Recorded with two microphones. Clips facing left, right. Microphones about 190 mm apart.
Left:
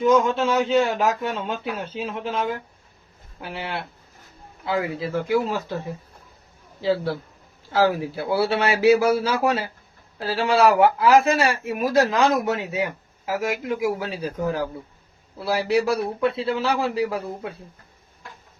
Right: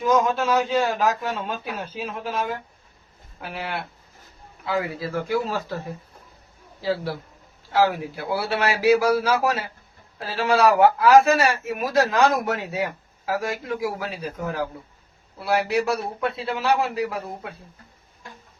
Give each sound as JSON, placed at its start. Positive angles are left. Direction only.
{"t": 0.1, "sound": "speech", "side_deg": 25}
{"t": 6.8, "sound": "speech", "side_deg": 25}